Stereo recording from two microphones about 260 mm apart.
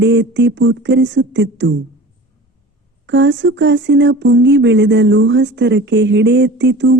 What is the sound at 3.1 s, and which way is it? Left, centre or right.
Speech, right.